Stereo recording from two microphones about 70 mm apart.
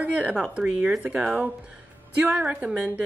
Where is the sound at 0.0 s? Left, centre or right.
Centre.